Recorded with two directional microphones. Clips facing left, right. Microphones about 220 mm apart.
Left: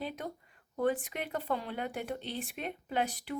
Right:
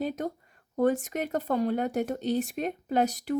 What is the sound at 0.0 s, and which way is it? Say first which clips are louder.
A woman's voice: right 8 dB; 45° right (ahead or behind).